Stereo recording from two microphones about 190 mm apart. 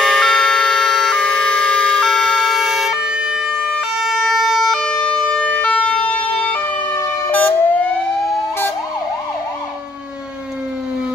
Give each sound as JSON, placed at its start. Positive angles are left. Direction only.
{"t": 0.0, "sound": "siren", "side_deg": 5}
{"t": 4.0, "sound": "emergency vehicle", "side_deg": 0}
{"t": 5.6, "sound": "ambulance", "side_deg": 5}
{"t": 6.2, "sound": "ambulance", "side_deg": 30}
{"t": 6.5, "sound": "emergency vehicle", "side_deg": 15}